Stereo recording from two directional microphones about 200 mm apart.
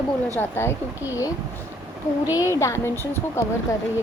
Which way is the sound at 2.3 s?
15° left (ahead or behind).